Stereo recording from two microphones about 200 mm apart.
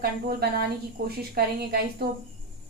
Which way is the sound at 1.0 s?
50° right (ahead or behind).